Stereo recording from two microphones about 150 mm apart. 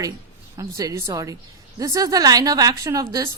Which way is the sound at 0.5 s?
20° right (ahead or behind).